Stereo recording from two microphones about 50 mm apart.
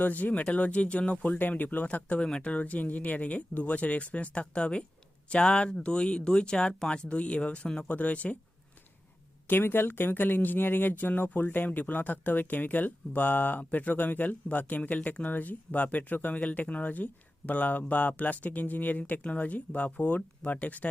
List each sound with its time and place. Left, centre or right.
0.0 s speech: left
9.5 s speech: left